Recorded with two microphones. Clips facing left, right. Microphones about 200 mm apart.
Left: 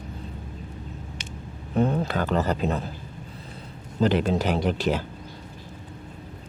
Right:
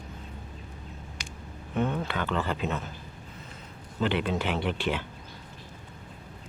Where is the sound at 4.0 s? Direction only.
40° left (ahead or behind).